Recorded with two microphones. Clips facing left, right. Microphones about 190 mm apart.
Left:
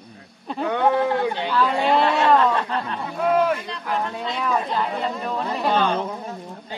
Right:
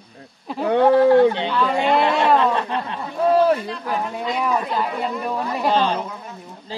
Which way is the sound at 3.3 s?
35° right (ahead or behind).